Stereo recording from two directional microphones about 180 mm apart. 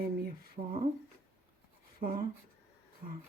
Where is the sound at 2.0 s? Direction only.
55° right (ahead or behind).